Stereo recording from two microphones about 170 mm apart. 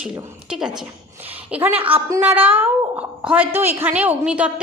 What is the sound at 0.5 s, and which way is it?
A woman's voice, 5° right (ahead or behind).